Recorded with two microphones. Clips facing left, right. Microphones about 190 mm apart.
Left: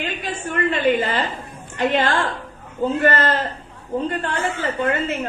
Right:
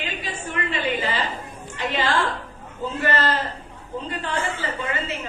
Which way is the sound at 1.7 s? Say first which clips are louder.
Left 5 dB; 55° left (ahead or behind).